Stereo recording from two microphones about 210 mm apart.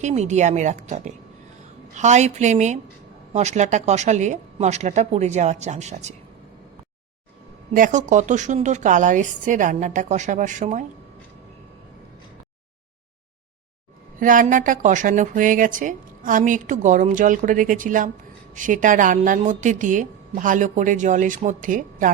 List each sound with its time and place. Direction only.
0.0 s speech: 35° right (ahead or behind)
7.7 s speech: 40° right (ahead or behind)
14.2 s speech: 40° right (ahead or behind)